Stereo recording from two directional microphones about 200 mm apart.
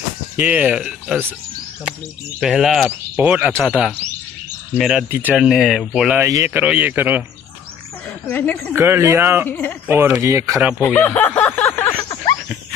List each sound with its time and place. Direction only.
0.4 s speech: 10° right (ahead or behind)
2.4 s speech: centre (ahead or behind)
6.2 s speech: 15° right (ahead or behind)
8.3 s a woman's voice: 10° left (ahead or behind)
8.7 s speech: 10° right (ahead or behind)
9.5 s a woman's voice: 10° left (ahead or behind)
9.8 s speech: 10° right (ahead or behind)
11.0 s snicker: 10° left (ahead or behind)